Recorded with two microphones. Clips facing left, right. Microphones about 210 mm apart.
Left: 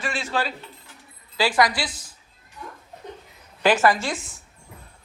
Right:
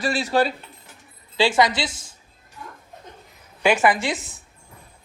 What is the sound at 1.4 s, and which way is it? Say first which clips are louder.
Speech: right 2 dB; 25° right (ahead or behind).